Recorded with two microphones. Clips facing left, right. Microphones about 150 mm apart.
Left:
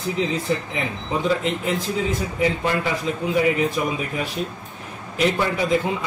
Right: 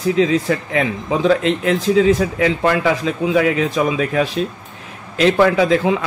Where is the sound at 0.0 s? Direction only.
90° right.